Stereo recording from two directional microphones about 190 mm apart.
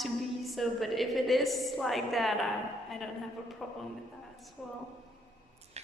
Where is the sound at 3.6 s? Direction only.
Centre (ahead or behind).